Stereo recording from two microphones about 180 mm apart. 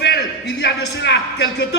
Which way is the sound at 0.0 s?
70° left (ahead or behind).